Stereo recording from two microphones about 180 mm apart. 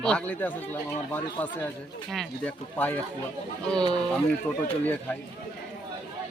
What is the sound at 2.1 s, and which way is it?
Speech, 5° left (ahead or behind).